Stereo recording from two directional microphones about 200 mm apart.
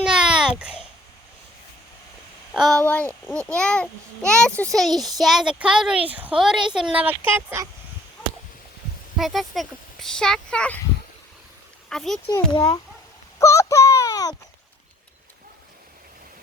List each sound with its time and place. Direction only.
0.0 s a sound: 5° right (ahead or behind)
2.5 s a child's voice: centre (ahead or behind)
9.1 s a child's voice: centre (ahead or behind)
11.9 s speech: centre (ahead or behind)
12.3 s a child's voice: 20° left (ahead or behind)